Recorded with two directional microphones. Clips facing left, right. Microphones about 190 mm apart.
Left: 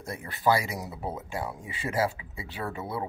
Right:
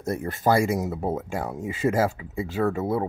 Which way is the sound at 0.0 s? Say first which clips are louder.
Right 3 dB; 45° right (ahead or behind).